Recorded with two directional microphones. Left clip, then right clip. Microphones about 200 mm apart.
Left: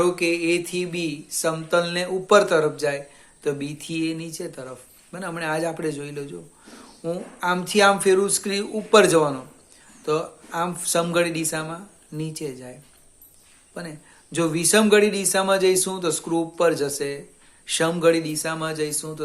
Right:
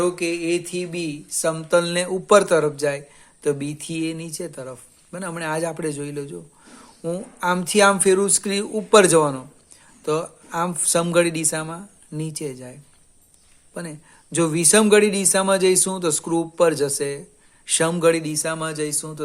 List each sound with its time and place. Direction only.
0.0 s mantra: 30° right (ahead or behind)
13.7 s mantra: 40° right (ahead or behind)